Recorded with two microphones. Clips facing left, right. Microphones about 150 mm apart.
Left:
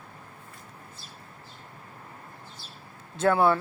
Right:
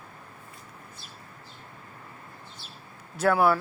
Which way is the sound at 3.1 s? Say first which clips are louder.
Even; 25° left (ahead or behind).